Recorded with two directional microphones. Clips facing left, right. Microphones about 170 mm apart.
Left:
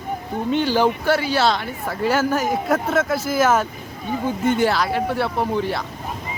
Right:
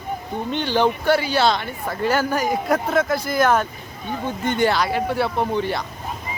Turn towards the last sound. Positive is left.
turn(degrees=0)  # may be behind; listen again after turning